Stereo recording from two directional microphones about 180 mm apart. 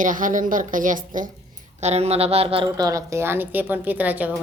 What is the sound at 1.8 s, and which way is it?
A woman's voice, 35° right (ahead or behind).